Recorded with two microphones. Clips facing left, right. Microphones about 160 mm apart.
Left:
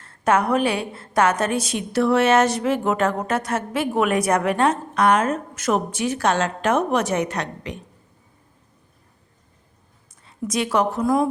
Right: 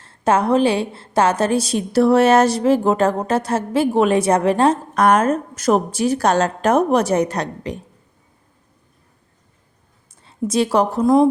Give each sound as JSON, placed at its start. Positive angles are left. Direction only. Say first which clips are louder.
{"t": 0.0, "sound": "a woman's voice", "louder": "right 2 dB", "side_deg": -30}
{"t": 10.2, "sound": "a woman's voice", "louder": "right 6 dB", "side_deg": -30}